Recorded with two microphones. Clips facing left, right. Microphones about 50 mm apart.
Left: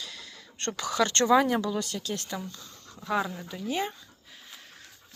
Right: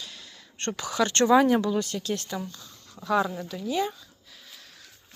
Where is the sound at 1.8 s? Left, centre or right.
Right.